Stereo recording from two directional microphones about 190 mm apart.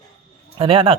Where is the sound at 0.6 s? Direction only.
30° right (ahead or behind).